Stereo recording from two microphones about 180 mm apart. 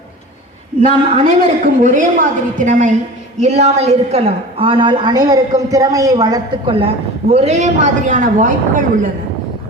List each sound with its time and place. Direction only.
0.8 s a woman's voice: 40° right (ahead or behind)